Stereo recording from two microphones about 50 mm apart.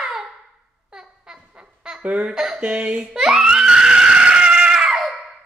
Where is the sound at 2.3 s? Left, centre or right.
Centre.